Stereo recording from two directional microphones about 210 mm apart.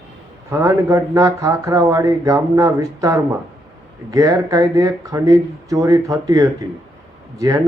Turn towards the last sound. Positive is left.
turn(degrees=-15)  # may be behind; listen again after turning